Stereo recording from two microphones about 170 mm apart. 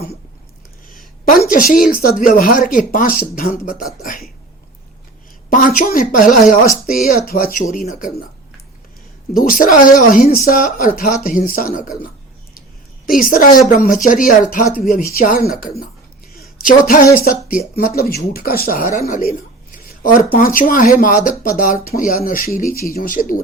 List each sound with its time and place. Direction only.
0.9 s speech: 55° left (ahead or behind)
5.5 s speech: 50° left (ahead or behind)
9.6 s speech: 55° left (ahead or behind)
13.1 s a woman's voice: 55° left (ahead or behind)